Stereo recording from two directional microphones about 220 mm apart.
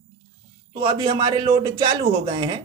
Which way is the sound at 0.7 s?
20° right (ahead or behind).